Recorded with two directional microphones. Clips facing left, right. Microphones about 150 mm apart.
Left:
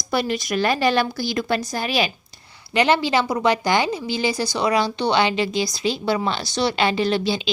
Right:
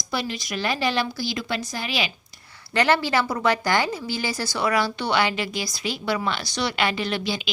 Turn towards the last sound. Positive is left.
turn(degrees=30)  # may be behind; listen again after turning